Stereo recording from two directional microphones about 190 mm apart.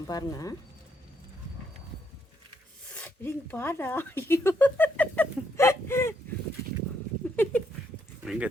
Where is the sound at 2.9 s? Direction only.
10° left (ahead or behind).